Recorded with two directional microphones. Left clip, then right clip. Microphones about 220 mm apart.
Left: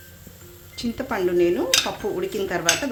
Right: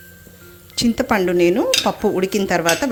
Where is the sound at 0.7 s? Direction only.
45° right (ahead or behind).